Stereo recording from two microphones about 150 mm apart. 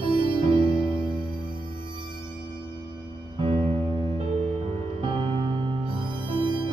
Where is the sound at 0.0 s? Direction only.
35° right (ahead or behind).